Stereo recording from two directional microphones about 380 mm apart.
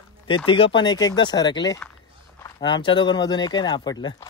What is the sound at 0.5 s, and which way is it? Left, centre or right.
A man's voice, centre.